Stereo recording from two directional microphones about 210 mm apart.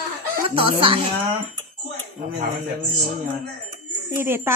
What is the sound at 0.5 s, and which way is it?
Speech, 25° right (ahead or behind).